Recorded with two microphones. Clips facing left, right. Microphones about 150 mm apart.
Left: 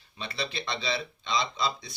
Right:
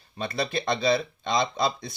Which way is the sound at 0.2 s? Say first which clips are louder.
Right 7 dB; 45° right (ahead or behind).